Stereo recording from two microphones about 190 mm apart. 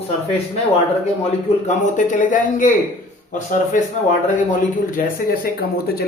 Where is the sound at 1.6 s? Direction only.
40° left (ahead or behind).